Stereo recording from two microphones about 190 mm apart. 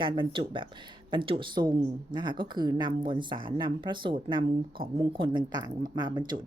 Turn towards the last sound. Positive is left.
turn(degrees=-20)  # may be behind; listen again after turning